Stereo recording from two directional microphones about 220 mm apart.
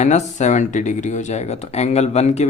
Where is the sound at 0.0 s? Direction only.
30° left (ahead or behind).